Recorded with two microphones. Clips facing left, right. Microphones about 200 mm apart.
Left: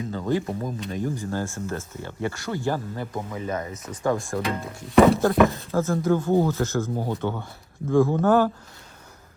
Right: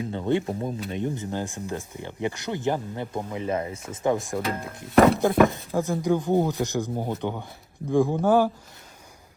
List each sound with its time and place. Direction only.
0.1 s speech: 25° right (ahead or behind)
4.4 s speech: centre (ahead or behind)
5.7 s speech: 15° right (ahead or behind)